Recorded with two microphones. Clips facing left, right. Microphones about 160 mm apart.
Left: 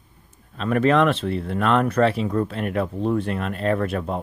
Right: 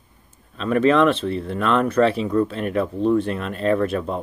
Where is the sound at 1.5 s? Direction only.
50° left (ahead or behind).